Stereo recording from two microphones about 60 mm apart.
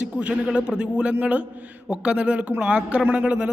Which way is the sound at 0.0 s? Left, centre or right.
Right.